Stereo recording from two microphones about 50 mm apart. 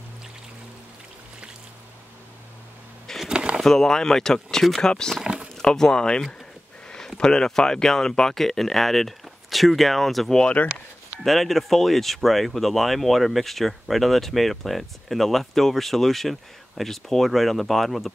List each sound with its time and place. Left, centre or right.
3.3 s a sound: centre
3.6 s speech: centre
5.2 s a sound: centre
5.6 s speech: centre
10.6 s speech: left
11.2 s speech: centre